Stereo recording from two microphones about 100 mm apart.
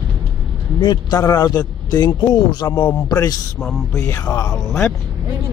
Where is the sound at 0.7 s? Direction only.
40° left (ahead or behind).